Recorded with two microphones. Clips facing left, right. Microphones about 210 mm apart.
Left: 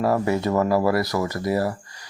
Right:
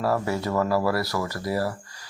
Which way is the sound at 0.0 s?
20° left (ahead or behind).